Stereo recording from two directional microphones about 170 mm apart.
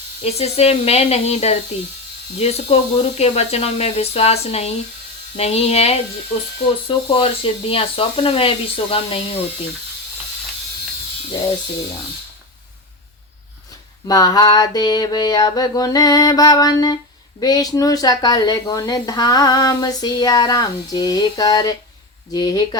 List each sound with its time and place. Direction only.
0.3 s speech: 40° left (ahead or behind)
14.1 s a woman's voice: 20° left (ahead or behind)